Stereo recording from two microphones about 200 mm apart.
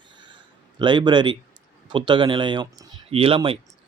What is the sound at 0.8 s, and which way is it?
Speech, 20° right (ahead or behind).